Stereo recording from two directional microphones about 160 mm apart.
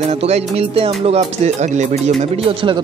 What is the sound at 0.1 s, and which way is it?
Speech, 40° right (ahead or behind).